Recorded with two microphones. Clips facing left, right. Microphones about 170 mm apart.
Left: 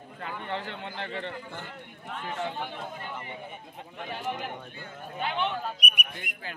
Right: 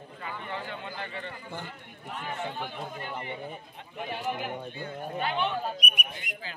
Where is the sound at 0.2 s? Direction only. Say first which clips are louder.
Left 3 dB; 70° left (ahead or behind).